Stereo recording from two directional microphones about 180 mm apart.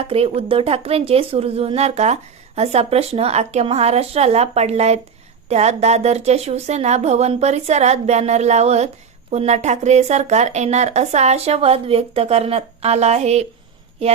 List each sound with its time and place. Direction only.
0.0 s speech: 30° right (ahead or behind)